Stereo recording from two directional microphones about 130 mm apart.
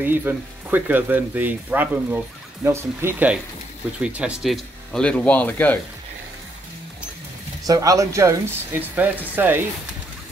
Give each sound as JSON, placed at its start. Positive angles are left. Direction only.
{"t": 0.0, "sound": "speech", "side_deg": -15}
{"t": 7.6, "sound": "speech", "side_deg": -25}